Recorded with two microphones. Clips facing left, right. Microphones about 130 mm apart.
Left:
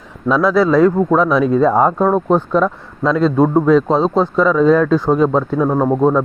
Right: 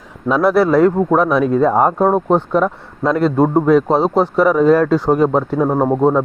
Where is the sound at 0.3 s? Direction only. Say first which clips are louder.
Even; 60° right (ahead or behind).